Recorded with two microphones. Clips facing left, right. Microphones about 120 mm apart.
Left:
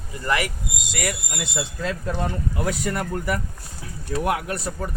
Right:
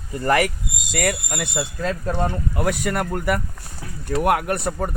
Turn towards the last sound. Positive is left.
turn(degrees=-60)  # may be behind; listen again after turning